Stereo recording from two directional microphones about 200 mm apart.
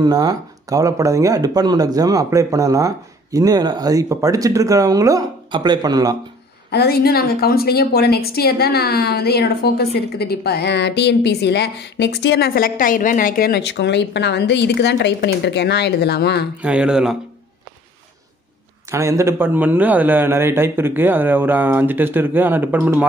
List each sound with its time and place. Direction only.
0.0 s speech: 20° right (ahead or behind)
6.7 s a woman's voice: 55° left (ahead or behind)
16.6 s speech: 5° right (ahead or behind)
18.9 s speech: 15° right (ahead or behind)